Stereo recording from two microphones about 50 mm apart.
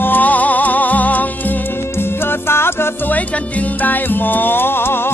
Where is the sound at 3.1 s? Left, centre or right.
Left.